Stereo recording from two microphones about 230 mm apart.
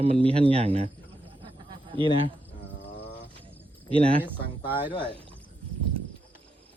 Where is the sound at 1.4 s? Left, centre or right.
Right.